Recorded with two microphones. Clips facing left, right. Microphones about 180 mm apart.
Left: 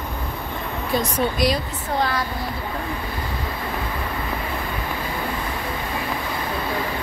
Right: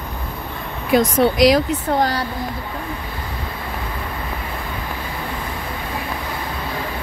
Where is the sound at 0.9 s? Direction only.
90° right.